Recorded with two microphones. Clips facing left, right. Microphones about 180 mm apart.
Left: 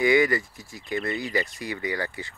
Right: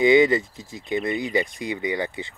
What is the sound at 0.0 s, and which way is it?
Speech, 20° right (ahead or behind).